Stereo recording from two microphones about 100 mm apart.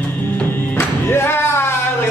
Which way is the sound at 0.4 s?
20° left (ahead or behind).